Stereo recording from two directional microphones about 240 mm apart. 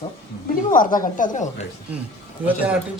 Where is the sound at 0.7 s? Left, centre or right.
Left.